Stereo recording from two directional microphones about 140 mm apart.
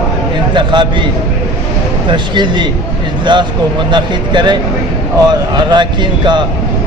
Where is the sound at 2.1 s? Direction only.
35° right (ahead or behind).